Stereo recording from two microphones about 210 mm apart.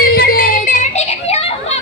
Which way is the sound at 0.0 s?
45° left (ahead or behind).